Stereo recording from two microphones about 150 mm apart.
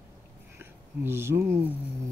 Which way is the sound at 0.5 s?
15° right (ahead or behind).